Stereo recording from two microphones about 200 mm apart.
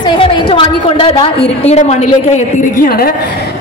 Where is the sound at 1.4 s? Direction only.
30° left (ahead or behind).